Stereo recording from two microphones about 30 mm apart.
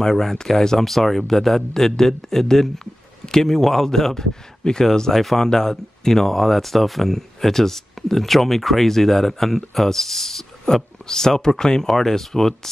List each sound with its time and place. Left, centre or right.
0.0 s speech: centre
4.6 s speech: left
5.1 s speech: centre
10.7 s speech: centre